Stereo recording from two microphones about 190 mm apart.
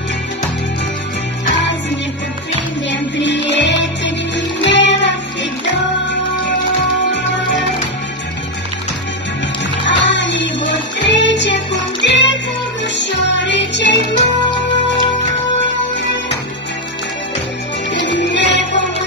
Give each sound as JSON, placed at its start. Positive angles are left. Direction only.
{"t": 2.9, "sound": "music", "side_deg": 70}
{"t": 9.8, "sound": "music", "side_deg": 70}
{"t": 14.1, "sound": "music", "side_deg": 25}
{"t": 17.9, "sound": "music", "side_deg": 70}